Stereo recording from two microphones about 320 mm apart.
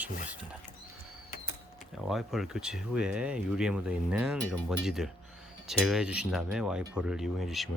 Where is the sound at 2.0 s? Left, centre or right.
Centre.